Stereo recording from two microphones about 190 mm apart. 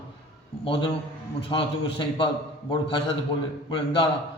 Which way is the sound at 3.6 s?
25° left (ahead or behind).